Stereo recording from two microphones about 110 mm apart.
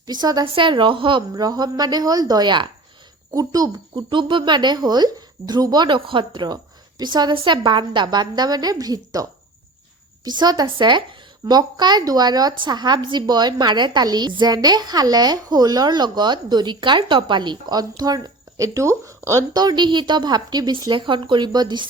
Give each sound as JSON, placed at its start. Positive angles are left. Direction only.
{"t": 0.0, "sound": "a woman's voice", "side_deg": -40}
{"t": 0.4, "sound": "speech", "side_deg": -50}
{"t": 1.3, "sound": "a woman's voice", "side_deg": -35}
{"t": 10.2, "sound": "a woman's voice", "side_deg": -40}